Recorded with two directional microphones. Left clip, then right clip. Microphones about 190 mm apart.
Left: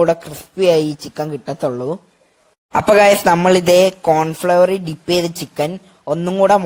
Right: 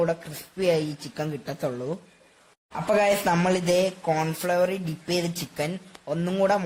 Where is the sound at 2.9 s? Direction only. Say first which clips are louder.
Left 11 dB; 50° left (ahead or behind).